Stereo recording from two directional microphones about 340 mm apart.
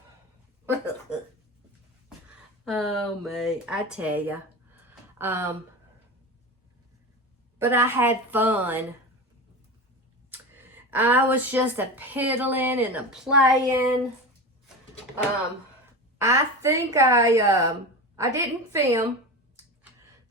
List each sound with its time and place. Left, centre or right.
1.1 s a sound: centre
2.6 s speech: centre
7.6 s speech: centre
10.3 s speech: centre
16.1 s a woman's voice: centre